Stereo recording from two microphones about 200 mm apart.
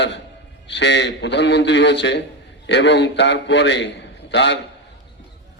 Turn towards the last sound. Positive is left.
turn(degrees=60)  # may be behind; listen again after turning